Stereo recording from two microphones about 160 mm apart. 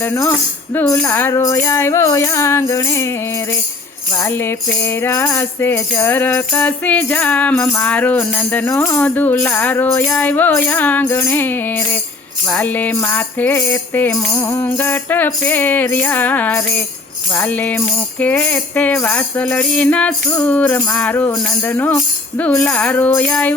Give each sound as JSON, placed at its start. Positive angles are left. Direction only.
{"t": 0.0, "sound": "speech", "side_deg": 15}
{"t": 4.1, "sound": "speech", "side_deg": 20}